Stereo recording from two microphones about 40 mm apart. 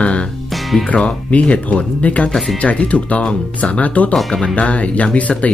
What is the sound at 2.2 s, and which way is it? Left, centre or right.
Speech, centre.